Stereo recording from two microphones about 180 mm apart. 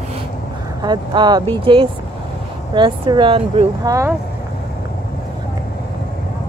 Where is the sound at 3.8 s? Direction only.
20° right (ahead or behind).